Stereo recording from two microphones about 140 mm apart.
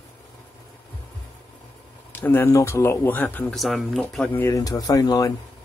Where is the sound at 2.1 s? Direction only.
15° left (ahead or behind).